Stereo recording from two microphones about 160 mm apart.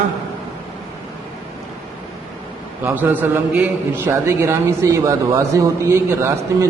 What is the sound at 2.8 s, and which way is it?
A man's voice, 10° right (ahead or behind).